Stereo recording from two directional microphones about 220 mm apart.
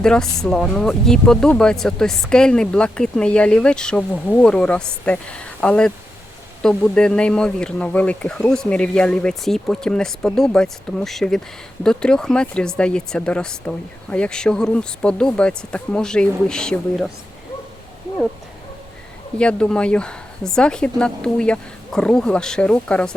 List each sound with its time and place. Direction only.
0.0 s speech: 5° left (ahead or behind)
19.4 s speech: 5° left (ahead or behind)